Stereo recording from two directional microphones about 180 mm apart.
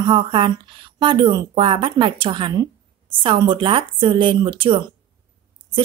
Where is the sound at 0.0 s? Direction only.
25° right (ahead or behind).